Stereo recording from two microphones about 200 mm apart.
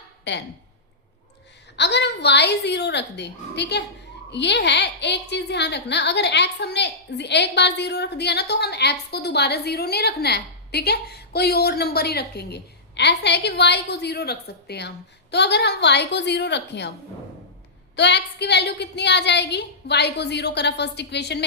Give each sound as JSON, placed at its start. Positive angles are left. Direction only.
{"t": 0.3, "sound": "a woman's voice", "side_deg": 60}
{"t": 1.7, "sound": "a woman's voice", "side_deg": 60}
{"t": 17.9, "sound": "a woman's voice", "side_deg": 60}